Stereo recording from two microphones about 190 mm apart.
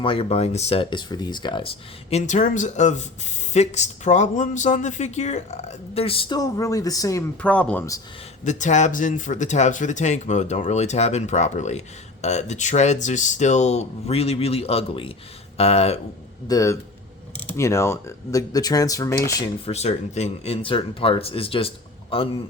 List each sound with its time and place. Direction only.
0.0 s speech: 30° left (ahead or behind)
7.4 s speech: 5° left (ahead or behind)
8.4 s speech: 40° left (ahead or behind)
16.5 s speech: 15° left (ahead or behind)
19.6 s a man's voice: 35° left (ahead or behind)